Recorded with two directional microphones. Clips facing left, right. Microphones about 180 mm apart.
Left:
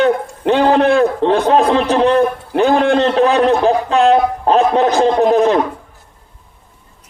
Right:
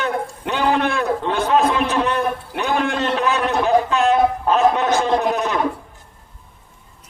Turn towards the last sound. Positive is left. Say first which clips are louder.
# left 8 dB
turn(degrees=30)  # may be behind; listen again after turning